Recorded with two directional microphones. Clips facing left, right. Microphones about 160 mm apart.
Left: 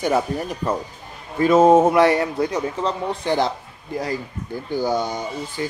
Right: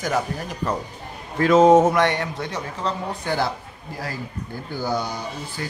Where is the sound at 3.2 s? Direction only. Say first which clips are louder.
Left 3 dB; 20° left (ahead or behind).